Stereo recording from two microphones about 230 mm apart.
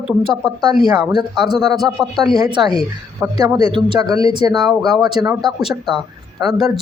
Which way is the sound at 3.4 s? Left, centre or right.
Centre.